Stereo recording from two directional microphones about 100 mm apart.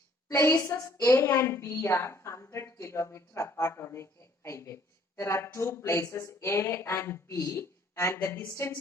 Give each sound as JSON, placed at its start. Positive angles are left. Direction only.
{"t": 0.3, "sound": "a woman's voice", "side_deg": 30}